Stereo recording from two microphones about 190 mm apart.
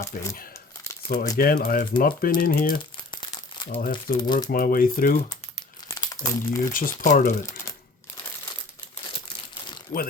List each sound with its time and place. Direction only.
0.1 s speech: 45° left (ahead or behind)
1.4 s speech: 50° left (ahead or behind)
3.1 s crumpling: 25° left (ahead or behind)
3.8 s speech: 45° left (ahead or behind)
4.2 s speech: 20° left (ahead or behind)
4.5 s speech: 50° left (ahead or behind)
5.9 s crumpling: 20° left (ahead or behind)
6.7 s speech: 45° left (ahead or behind)
9.9 s speech: 20° left (ahead or behind)